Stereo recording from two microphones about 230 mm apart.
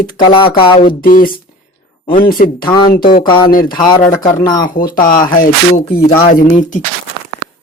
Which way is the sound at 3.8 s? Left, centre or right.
Centre.